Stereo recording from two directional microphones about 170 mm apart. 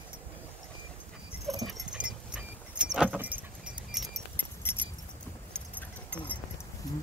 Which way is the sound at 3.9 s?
Centre (ahead or behind).